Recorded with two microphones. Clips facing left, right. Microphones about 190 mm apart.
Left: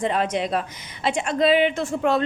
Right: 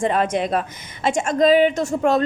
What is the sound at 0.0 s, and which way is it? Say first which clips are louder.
A woman's voice: right 3 dB; 50° right (ahead or behind).